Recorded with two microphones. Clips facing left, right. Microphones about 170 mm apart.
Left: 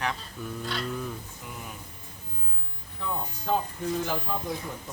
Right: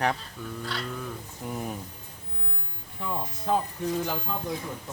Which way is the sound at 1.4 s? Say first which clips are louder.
Right 8 dB; 40° right (ahead or behind).